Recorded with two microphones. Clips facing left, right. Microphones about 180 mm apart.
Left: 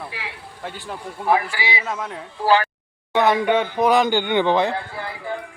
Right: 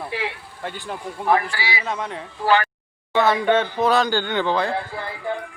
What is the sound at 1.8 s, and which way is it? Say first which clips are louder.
Speech: right 1 dB; 5° left (ahead or behind).